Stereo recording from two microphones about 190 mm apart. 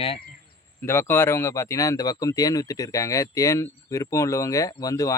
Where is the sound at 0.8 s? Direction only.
10° left (ahead or behind).